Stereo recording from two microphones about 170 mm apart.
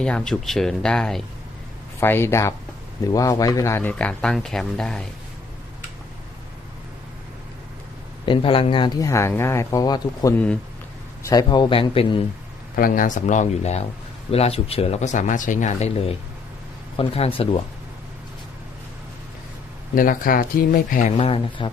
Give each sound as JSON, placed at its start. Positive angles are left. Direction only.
{"t": 0.0, "sound": "speech", "side_deg": 5}
{"t": 8.3, "sound": "speech", "side_deg": 30}
{"t": 10.3, "sound": "speech", "side_deg": 5}
{"t": 11.2, "sound": "speech", "side_deg": 20}
{"t": 12.7, "sound": "speech", "side_deg": 55}
{"t": 20.0, "sound": "speech", "side_deg": 55}
{"t": 21.2, "sound": "speech", "side_deg": 35}